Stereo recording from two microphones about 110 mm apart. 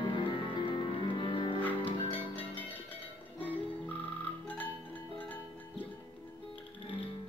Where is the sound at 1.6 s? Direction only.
15° left (ahead or behind).